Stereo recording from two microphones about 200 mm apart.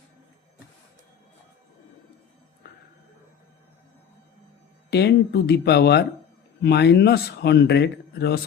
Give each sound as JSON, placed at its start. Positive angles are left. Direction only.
{"t": 4.9, "sound": "speech", "side_deg": 55}